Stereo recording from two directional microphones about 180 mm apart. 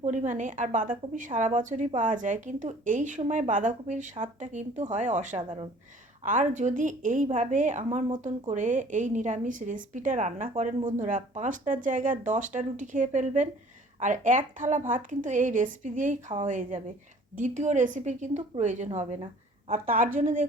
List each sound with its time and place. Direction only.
0.0 s a woman's voice: 40° right (ahead or behind)
5.4 s speech: 30° right (ahead or behind)
6.2 s a woman's voice: 45° right (ahead or behind)